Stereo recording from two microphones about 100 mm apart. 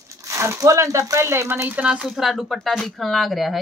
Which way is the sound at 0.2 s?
30° right (ahead or behind).